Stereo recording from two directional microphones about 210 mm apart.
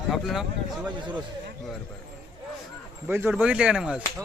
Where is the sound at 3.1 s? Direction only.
10° right (ahead or behind).